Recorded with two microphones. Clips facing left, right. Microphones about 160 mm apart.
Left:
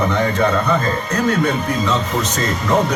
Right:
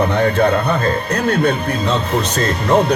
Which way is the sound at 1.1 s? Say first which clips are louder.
Left 1 dB; 60° right (ahead or behind).